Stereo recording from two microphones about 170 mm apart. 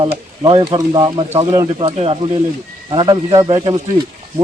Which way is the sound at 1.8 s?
35° right (ahead or behind).